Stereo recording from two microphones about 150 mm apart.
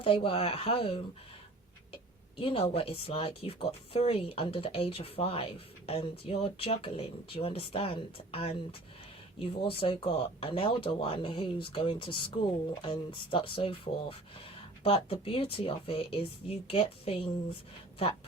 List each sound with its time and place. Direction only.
0.0 s speech: 35° left (ahead or behind)
2.4 s speech: 40° left (ahead or behind)